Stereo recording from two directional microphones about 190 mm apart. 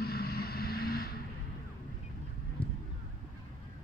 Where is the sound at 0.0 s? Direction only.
55° left (ahead or behind).